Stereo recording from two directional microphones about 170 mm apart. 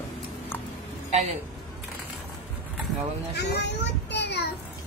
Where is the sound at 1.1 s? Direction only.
40° right (ahead or behind).